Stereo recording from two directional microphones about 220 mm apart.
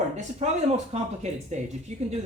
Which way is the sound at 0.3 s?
30° right (ahead or behind).